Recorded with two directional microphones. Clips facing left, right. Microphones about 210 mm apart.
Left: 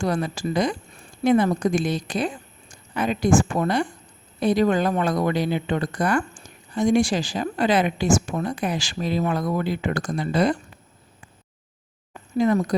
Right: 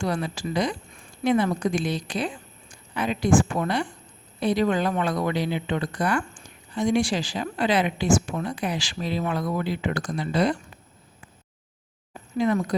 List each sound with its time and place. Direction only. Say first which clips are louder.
0.0 s a woman's voice: left 3 dB; 45° left (ahead or behind)
12.4 s speech: left 3 dB; 40° left (ahead or behind)